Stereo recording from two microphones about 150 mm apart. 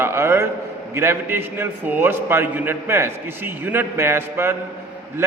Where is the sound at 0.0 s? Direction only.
15° right (ahead or behind).